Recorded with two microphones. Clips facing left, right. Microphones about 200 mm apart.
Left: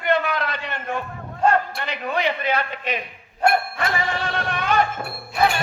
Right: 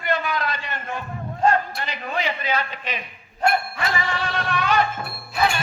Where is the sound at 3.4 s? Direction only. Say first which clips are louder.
Left 2 dB; 55° left (ahead or behind).